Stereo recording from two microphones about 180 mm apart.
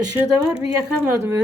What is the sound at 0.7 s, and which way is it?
Speech, 15° right (ahead or behind).